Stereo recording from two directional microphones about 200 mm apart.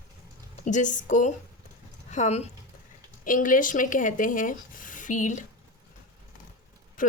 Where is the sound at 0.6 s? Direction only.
40° left (ahead or behind).